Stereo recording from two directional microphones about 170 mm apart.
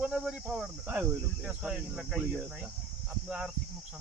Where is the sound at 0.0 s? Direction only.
5° right (ahead or behind).